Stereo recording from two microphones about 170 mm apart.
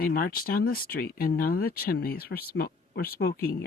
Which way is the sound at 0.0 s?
60° left (ahead or behind).